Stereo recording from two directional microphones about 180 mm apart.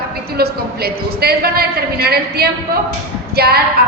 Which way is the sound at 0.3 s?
60° right (ahead or behind).